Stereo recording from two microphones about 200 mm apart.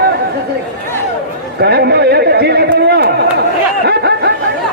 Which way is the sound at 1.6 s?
55° right (ahead or behind).